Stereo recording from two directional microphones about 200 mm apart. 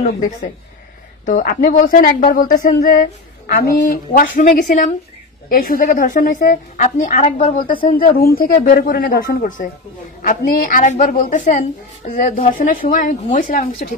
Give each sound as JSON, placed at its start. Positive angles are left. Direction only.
{"t": 1.2, "sound": "a woman's voice", "side_deg": 45}